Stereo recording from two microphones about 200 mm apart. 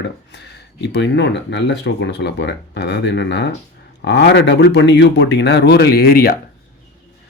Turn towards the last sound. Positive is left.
turn(degrees=50)  # may be behind; listen again after turning